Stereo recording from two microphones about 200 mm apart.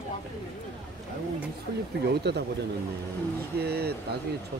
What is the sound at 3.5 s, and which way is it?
Speech, 55° right (ahead or behind).